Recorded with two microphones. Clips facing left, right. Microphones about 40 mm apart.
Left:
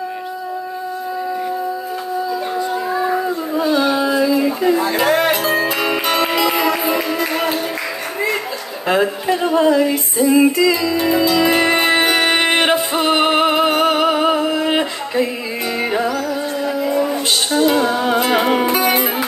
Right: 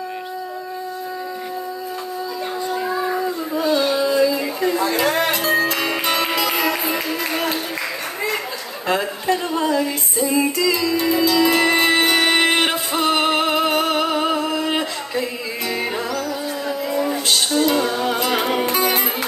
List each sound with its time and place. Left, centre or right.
2.9 s a sound: centre
3.7 s music: centre
4.4 s a sound: centre
5.4 s music: centre
8.8 s speech: centre
10.1 s music: left
10.4 s music: left